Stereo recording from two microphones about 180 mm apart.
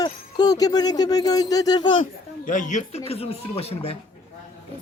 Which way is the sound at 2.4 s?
45° left (ahead or behind).